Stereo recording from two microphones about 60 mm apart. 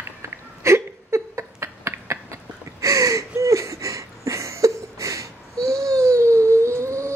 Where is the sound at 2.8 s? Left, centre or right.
Right.